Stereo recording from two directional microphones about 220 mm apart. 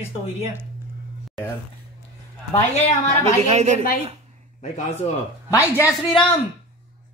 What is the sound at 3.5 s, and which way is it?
Speech, 30° right (ahead or behind).